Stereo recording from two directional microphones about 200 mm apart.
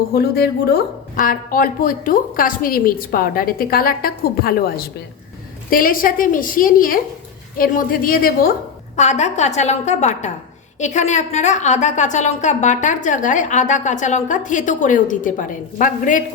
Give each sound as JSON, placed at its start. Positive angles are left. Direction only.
{"t": 0.1, "sound": "a woman's voice", "side_deg": 50}
{"t": 9.0, "sound": "a woman's voice", "side_deg": 35}